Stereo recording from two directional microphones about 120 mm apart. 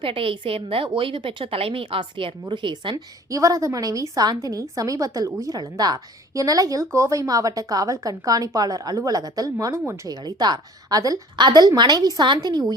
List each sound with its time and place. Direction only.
0.0 s a woman's voice: 50° right (ahead or behind)
2.9 s a woman's voice: 25° right (ahead or behind)